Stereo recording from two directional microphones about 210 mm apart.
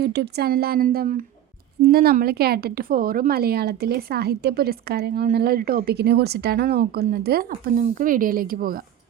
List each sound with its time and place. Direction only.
0.0 s a woman's voice: 50° right (ahead or behind)